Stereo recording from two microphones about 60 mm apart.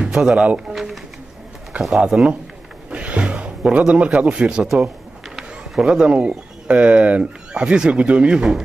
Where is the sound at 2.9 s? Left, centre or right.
Right.